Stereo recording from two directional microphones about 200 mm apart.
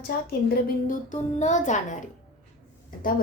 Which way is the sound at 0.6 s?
40° left (ahead or behind).